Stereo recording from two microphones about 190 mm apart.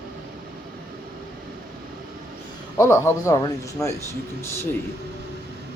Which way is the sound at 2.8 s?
15° left (ahead or behind).